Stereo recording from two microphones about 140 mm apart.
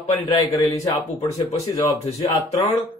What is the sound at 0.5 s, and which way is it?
Speech, 25° left (ahead or behind).